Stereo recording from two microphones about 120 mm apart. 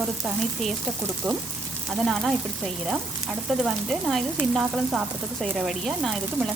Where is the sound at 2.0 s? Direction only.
Centre (ahead or behind).